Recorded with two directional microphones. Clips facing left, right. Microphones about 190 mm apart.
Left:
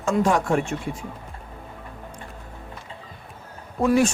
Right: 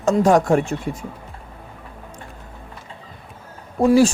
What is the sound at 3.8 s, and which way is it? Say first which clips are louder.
Speech: right 5 dB; 30° right (ahead or behind).